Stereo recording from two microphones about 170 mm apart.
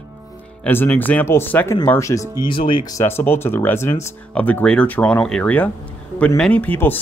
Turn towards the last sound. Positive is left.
turn(degrees=10)  # may be behind; listen again after turning